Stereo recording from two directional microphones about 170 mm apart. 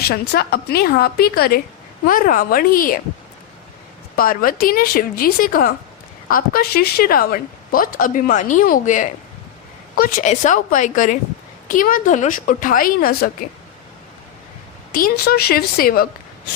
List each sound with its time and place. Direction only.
0.0 s a woman's voice: 65° left (ahead or behind)
4.2 s a woman's voice: 55° left (ahead or behind)
14.9 s a woman's voice: 60° left (ahead or behind)